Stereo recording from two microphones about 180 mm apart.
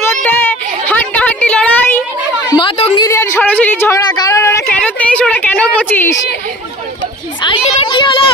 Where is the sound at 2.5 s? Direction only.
30° left (ahead or behind).